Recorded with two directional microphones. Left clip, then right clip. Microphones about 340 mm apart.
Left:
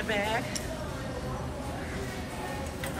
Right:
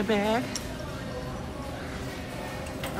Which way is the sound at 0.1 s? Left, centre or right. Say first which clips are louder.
Right 3 dB; centre.